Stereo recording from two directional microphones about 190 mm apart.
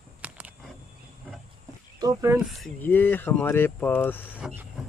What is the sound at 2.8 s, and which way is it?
Speech, 10° left (ahead or behind).